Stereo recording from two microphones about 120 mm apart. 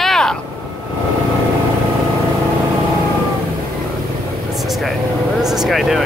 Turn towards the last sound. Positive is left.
turn(degrees=0)  # may be behind; listen again after turning